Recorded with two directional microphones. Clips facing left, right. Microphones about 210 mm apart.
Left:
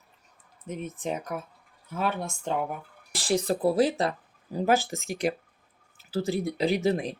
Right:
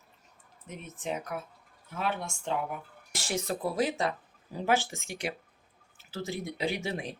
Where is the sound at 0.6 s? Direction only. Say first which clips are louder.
Left 5 dB; 45° left (ahead or behind).